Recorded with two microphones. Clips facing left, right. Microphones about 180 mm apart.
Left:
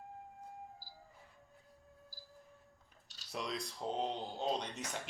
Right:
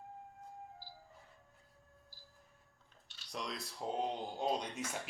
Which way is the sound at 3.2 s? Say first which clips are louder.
Left 2 dB; centre (ahead or behind).